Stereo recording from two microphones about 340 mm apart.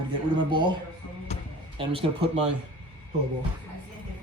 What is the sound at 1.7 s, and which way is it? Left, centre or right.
Speech, centre.